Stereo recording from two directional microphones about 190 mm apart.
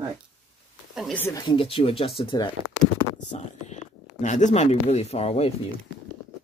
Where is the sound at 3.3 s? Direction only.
35° left (ahead or behind).